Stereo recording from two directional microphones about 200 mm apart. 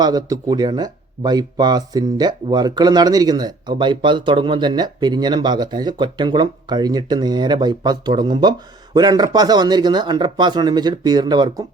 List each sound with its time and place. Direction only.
0.0 s speech: 20° right (ahead or behind)